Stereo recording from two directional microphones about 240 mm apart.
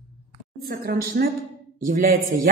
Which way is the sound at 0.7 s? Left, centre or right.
Right.